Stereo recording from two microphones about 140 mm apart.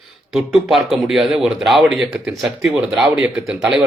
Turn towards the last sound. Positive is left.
turn(degrees=-5)  # may be behind; listen again after turning